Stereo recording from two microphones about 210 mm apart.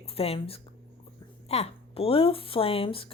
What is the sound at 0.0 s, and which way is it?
Speech, 30° left (ahead or behind).